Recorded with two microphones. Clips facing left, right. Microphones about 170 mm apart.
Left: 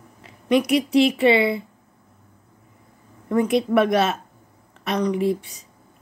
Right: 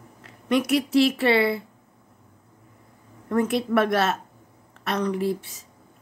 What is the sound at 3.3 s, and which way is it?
A woman's voice, 15° left (ahead or behind).